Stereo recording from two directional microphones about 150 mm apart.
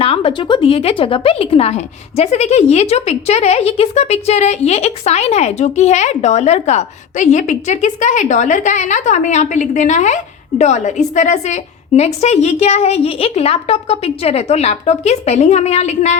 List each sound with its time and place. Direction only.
0.0 s a woman's voice: 40° left (ahead or behind)